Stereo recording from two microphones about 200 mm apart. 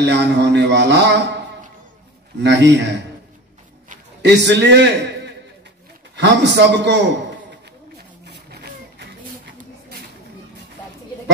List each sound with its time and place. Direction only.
0.0 s a man's voice: 60° right (ahead or behind)
2.4 s a man's voice: 60° right (ahead or behind)
4.2 s a man's voice: 60° right (ahead or behind)
9.6 s a sound: 50° right (ahead or behind)